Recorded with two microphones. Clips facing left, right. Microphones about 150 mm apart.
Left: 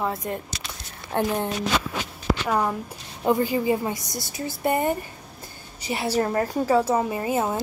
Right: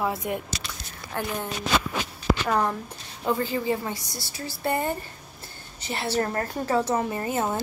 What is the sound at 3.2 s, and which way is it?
A woman's voice, 15° left (ahead or behind).